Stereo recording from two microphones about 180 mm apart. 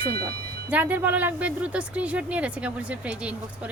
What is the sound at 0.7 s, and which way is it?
Speech, 10° right (ahead or behind).